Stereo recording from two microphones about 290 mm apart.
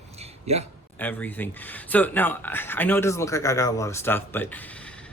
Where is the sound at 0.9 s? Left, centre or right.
Centre.